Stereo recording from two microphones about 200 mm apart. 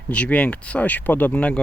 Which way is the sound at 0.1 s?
5° left (ahead or behind).